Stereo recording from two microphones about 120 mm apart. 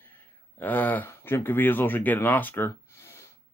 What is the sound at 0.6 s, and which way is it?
Speech, 15° left (ahead or behind).